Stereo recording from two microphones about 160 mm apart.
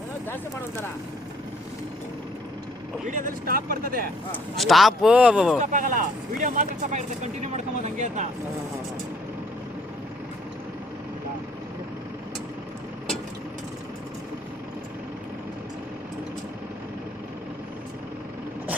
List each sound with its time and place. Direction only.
3.1 s speech: 55° right (ahead or behind)
4.5 s speech: centre (ahead or behind)
5.5 s speech: 55° right (ahead or behind)